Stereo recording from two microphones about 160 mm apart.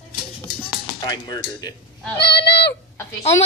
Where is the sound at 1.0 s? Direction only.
25° left (ahead or behind).